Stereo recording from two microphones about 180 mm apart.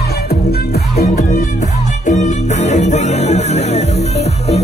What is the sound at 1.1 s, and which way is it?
Music, 45° left (ahead or behind).